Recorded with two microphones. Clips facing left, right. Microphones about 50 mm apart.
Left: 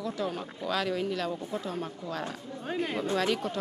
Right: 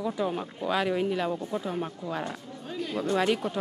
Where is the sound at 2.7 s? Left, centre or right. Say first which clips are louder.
Left 1 dB; left.